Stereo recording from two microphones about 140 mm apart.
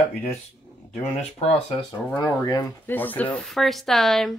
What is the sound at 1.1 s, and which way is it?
Speech, 45° left (ahead or behind).